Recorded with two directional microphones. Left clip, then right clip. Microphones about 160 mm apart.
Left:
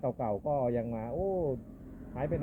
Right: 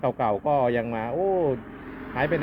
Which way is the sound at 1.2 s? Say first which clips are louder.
Right 9 dB; 30° right (ahead or behind).